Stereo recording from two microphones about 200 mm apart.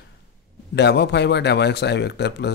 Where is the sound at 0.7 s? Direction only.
55° left (ahead or behind).